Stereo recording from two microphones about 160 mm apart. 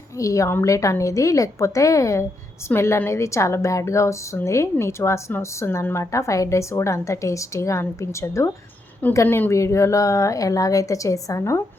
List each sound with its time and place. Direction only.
0.2 s a woman's voice: 20° left (ahead or behind)